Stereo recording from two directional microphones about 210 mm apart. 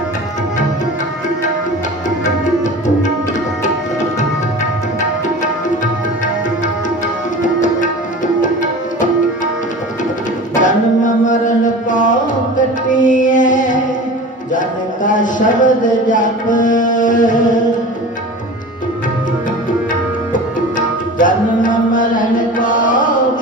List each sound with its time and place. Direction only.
2.0 s tabla: 35° left (ahead or behind)
7.4 s tabla: 35° left (ahead or behind)
10.5 s music: 35° left (ahead or behind)
15.0 s music: 40° left (ahead or behind)
20.7 s tabla: 40° left (ahead or behind)